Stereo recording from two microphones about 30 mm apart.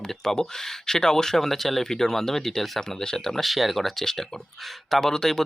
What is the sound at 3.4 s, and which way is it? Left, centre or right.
Speech, centre.